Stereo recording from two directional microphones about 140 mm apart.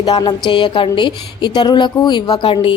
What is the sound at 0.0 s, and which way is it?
A woman's voice, 30° left (ahead or behind).